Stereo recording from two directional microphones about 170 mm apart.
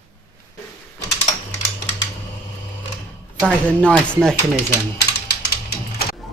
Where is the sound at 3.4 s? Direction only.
Centre (ahead or behind).